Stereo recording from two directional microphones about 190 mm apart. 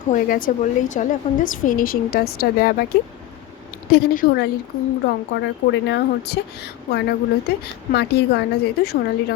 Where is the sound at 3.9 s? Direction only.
55° left (ahead or behind).